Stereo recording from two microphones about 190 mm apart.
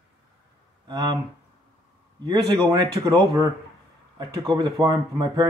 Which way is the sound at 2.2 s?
20° right (ahead or behind).